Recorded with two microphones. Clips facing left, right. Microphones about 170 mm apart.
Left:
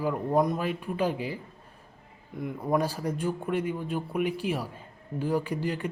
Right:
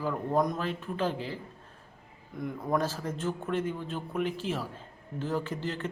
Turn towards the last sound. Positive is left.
turn(degrees=10)  # may be behind; listen again after turning